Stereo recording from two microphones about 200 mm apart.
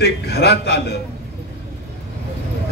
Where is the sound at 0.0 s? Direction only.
55° left (ahead or behind).